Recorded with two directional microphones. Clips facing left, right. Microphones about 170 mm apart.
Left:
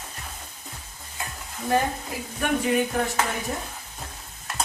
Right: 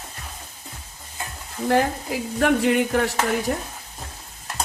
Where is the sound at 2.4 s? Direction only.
75° right (ahead or behind).